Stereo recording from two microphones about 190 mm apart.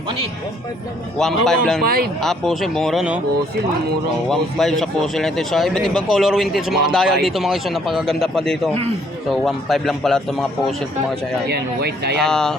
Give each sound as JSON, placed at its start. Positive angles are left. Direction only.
{"t": 1.2, "sound": "speech", "side_deg": 0}
{"t": 1.8, "sound": "speech", "side_deg": -50}
{"t": 2.2, "sound": "speech", "side_deg": 0}
{"t": 4.3, "sound": "speech", "side_deg": 0}
{"t": 11.4, "sound": "speech", "side_deg": -55}
{"t": 12.1, "sound": "speech", "side_deg": 5}